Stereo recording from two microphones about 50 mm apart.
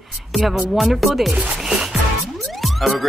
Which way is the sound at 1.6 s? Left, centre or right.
Centre.